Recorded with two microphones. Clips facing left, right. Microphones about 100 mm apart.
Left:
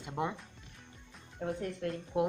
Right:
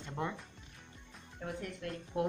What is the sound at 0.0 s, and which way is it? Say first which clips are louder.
Music: left 3 dB; 15° left (ahead or behind).